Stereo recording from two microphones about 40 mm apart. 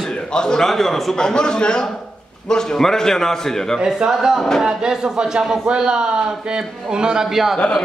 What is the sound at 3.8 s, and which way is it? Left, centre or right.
A man's voice, centre.